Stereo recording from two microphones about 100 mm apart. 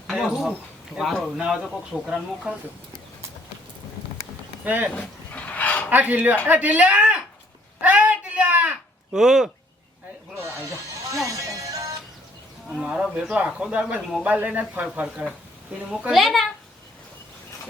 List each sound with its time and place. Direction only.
0.1 s a child's voice: centre (ahead or behind)
1.9 s speech: 10° right (ahead or behind)
4.6 s speech: 15° right (ahead or behind)
4.9 s dog: 15° left (ahead or behind)
5.9 s speech: 15° right (ahead or behind)
7.8 s a sound: 15° right (ahead or behind)
9.1 s a child's voice: 5° right (ahead or behind)
10.3 s music: 30° right (ahead or behind)
12.8 s speech: 10° right (ahead or behind)
15.0 s a child's voice: centre (ahead or behind)